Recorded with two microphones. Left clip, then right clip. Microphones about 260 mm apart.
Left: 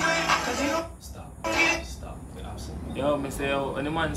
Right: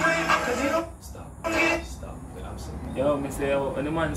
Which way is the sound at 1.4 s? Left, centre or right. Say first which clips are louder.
Even; left.